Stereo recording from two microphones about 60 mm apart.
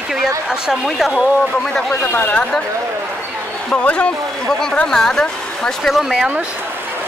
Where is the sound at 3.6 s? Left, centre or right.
Centre.